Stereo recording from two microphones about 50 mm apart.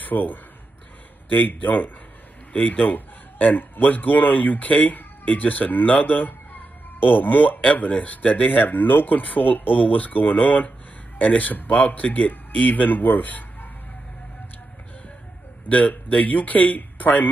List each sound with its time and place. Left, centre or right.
0.0 s a man's voice: left
15.7 s a man's voice: left